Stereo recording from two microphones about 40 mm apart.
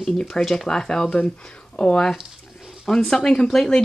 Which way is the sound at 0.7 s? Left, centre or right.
Centre.